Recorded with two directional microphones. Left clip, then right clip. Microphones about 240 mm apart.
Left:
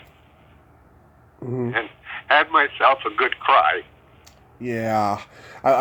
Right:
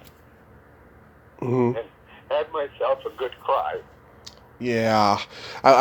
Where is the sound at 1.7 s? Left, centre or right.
Centre.